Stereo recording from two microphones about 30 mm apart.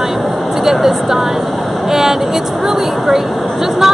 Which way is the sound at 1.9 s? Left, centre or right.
Centre.